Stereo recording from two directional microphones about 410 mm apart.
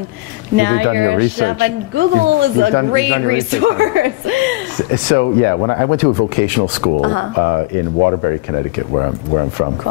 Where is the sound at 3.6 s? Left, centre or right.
Right.